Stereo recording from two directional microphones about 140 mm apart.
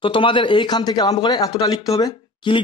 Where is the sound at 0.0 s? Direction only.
40° left (ahead or behind).